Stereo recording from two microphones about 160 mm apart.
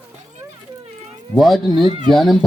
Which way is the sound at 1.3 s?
Centre (ahead or behind).